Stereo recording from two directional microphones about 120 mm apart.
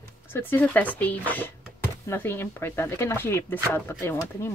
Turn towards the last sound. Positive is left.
turn(degrees=20)  # may be behind; listen again after turning